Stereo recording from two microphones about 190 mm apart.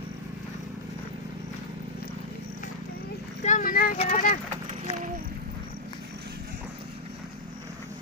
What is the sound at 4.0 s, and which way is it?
Vehicle, 40° left (ahead or behind).